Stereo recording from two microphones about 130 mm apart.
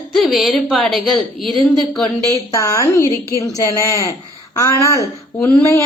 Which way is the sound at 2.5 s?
25° left (ahead or behind).